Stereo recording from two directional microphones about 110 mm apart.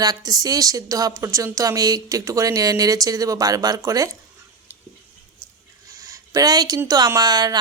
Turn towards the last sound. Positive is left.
turn(degrees=-35)  # may be behind; listen again after turning